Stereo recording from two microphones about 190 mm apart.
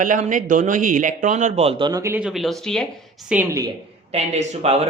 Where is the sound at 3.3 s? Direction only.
10° right (ahead or behind).